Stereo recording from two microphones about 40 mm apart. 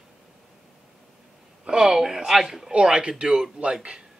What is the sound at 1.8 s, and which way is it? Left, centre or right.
Speech, centre.